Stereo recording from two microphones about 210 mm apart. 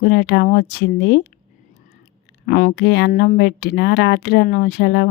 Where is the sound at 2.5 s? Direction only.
45° left (ahead or behind).